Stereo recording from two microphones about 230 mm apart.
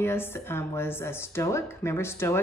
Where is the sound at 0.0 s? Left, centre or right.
Centre.